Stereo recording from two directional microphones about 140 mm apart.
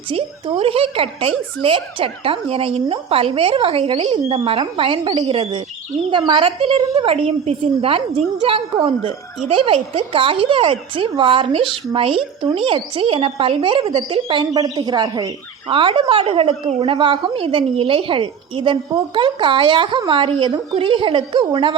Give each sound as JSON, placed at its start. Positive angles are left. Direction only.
{"t": 0.1, "sound": "a woman's voice", "side_deg": -45}
{"t": 14.5, "sound": "a woman's voice", "side_deg": -30}